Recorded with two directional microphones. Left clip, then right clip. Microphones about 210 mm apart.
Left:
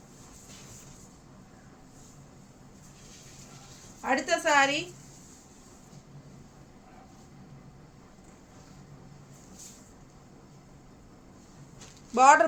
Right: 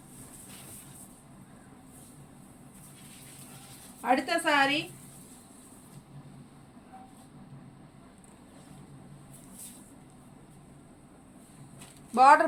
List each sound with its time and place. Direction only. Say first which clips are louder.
4.0 s a woman's voice: even; 20° left (ahead or behind)
12.1 s speech: even; 35° left (ahead or behind)